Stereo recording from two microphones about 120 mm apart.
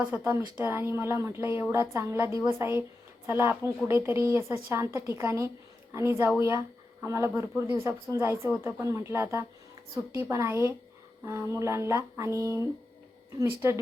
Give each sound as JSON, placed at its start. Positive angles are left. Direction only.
{"t": 0.0, "sound": "a woman's voice", "side_deg": -15}